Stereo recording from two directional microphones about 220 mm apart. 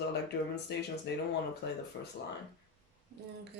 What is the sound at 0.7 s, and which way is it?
Speech, 50° left (ahead or behind).